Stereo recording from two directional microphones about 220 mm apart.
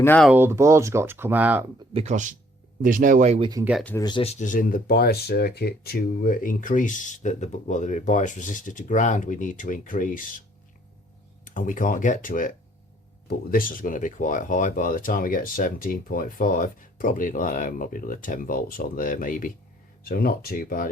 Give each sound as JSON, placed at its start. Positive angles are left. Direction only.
{"t": 0.0, "sound": "speech", "side_deg": 10}
{"t": 0.3, "sound": "speech", "side_deg": -10}
{"t": 1.9, "sound": "speech", "side_deg": -30}
{"t": 3.5, "sound": "speech", "side_deg": -5}
{"t": 3.8, "sound": "speech", "side_deg": 15}
{"t": 11.4, "sound": "speech", "side_deg": 35}